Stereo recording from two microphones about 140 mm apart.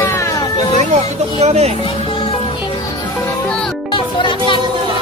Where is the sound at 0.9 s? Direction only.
50° right (ahead or behind).